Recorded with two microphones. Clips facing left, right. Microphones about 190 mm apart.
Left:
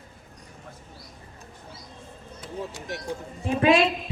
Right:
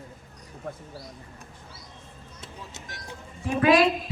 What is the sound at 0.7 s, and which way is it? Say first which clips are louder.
Speech: right 11 dB; 50° right (ahead or behind).